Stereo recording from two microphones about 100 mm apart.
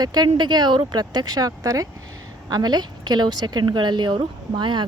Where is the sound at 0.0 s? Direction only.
45° right (ahead or behind).